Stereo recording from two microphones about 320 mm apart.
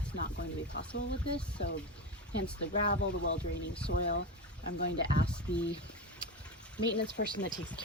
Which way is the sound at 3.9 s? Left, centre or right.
Left.